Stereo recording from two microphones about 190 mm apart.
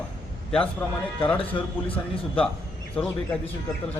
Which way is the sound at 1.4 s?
30° left (ahead or behind).